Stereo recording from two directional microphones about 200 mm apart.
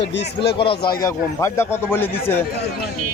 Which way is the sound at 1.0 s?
15° left (ahead or behind).